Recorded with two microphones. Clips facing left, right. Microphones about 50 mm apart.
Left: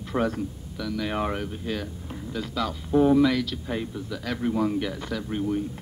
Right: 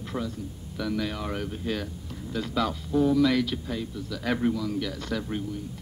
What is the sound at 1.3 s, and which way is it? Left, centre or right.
Speech, centre.